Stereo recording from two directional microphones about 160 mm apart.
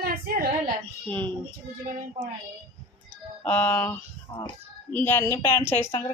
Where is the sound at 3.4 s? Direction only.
10° left (ahead or behind).